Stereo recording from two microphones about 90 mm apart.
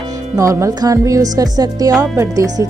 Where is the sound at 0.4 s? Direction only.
35° right (ahead or behind).